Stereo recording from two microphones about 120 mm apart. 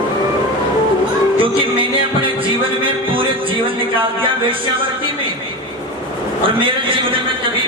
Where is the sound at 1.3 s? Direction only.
45° right (ahead or behind).